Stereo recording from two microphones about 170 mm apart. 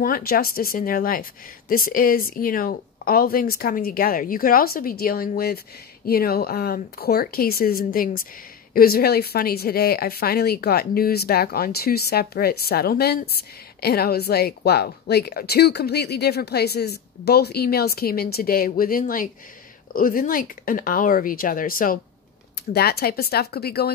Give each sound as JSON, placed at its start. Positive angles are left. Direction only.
{"t": 0.0, "sound": "speech", "side_deg": 60}
{"t": 22.7, "sound": "speech", "side_deg": 65}